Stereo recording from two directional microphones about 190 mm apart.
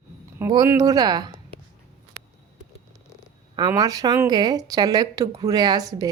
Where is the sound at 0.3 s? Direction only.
15° right (ahead or behind).